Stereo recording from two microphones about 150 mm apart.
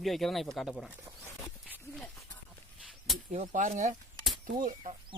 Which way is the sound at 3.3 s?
55° right (ahead or behind).